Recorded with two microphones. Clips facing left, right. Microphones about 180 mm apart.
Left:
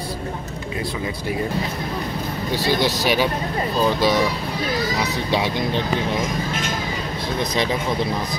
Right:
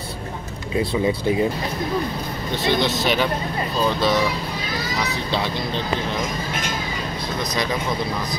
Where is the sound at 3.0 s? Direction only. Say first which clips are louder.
Left 1 dB; 10° left (ahead or behind).